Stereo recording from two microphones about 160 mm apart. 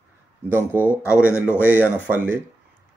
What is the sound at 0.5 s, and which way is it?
Speech, 15° right (ahead or behind).